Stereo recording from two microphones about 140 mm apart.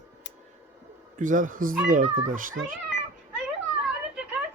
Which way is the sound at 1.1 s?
65° right (ahead or behind).